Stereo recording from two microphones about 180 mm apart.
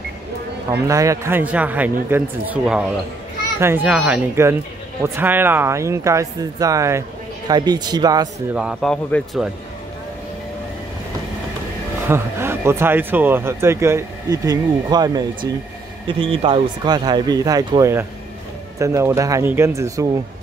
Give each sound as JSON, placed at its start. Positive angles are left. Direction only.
{"t": 0.7, "sound": "speech", "side_deg": -15}
{"t": 8.5, "sound": "a man's voice", "side_deg": 0}
{"t": 12.1, "sound": "speech", "side_deg": -15}